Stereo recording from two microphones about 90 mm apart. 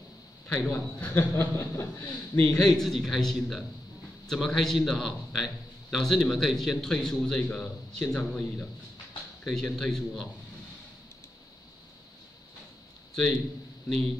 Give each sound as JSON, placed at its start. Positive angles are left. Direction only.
{"t": 0.6, "sound": "a man's voice", "side_deg": 25}
{"t": 2.0, "sound": "speech", "side_deg": 15}
{"t": 2.5, "sound": "a man's voice", "side_deg": 5}